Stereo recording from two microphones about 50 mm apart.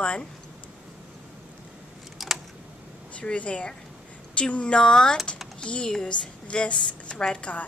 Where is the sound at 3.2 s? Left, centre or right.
Left.